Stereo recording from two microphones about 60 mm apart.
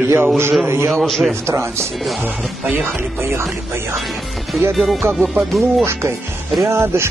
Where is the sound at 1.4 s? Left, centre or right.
Right.